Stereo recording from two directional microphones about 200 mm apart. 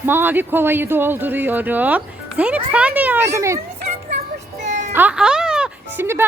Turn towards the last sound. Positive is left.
turn(degrees=-10)  # may be behind; listen again after turning